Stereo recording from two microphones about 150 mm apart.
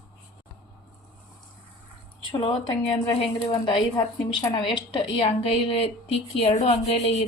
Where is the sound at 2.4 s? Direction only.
35° left (ahead or behind).